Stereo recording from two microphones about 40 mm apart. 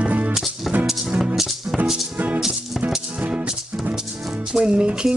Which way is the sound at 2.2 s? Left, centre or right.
Right.